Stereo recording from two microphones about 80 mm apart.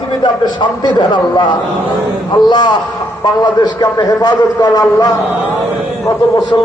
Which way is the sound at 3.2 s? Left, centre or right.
Left.